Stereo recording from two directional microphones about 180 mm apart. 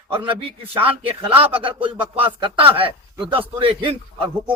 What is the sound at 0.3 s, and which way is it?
A man's voice, 30° right (ahead or behind).